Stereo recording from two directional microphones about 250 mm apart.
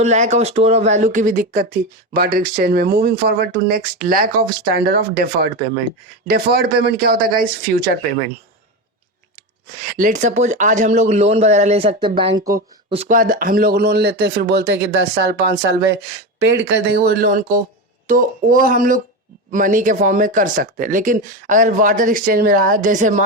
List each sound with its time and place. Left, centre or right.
0.0 s speech: right
9.9 s speech: right